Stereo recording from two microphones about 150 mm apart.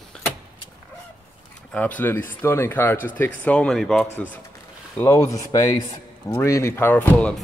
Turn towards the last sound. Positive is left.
turn(degrees=10)  # may be behind; listen again after turning